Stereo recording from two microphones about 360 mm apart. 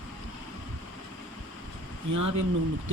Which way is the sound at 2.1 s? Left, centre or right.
Right.